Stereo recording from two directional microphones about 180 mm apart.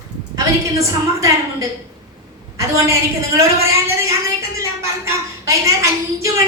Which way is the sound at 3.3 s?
15° right (ahead or behind).